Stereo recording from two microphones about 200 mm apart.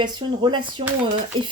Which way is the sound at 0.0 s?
20° right (ahead or behind).